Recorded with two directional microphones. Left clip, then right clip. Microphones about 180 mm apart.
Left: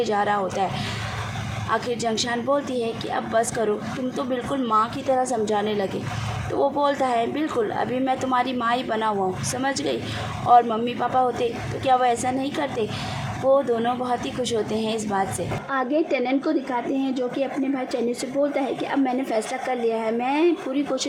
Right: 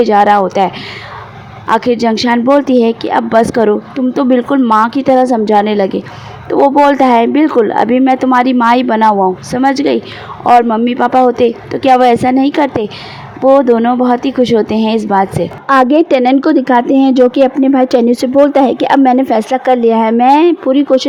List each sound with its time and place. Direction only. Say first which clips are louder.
0.0 s speech: right 15 dB; 45° right (ahead or behind)